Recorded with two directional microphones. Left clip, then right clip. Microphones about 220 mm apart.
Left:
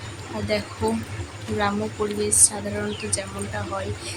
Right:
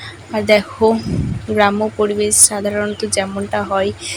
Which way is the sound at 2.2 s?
30° right (ahead or behind).